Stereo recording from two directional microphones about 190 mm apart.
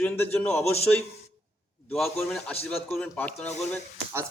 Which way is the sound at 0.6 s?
35° left (ahead or behind).